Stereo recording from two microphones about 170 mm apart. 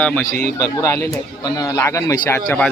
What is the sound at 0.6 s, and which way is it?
Speech, 20° left (ahead or behind).